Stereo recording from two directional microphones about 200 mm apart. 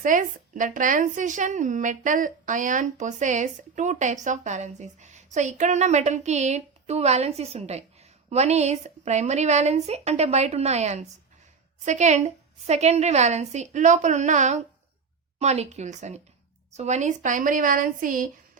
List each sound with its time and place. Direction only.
0.0 s speech: 40° right (ahead or behind)